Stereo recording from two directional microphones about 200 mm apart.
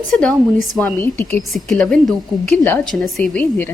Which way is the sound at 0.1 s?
5° left (ahead or behind).